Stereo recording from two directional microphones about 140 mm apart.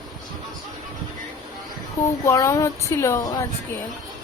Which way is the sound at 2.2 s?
20° left (ahead or behind).